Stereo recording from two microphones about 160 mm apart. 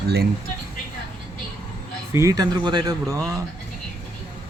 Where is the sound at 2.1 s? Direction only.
20° right (ahead or behind).